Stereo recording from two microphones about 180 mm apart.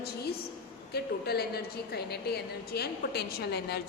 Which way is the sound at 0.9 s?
60° left (ahead or behind).